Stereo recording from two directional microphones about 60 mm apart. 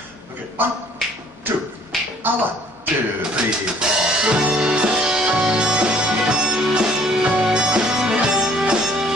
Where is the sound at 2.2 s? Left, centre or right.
Right.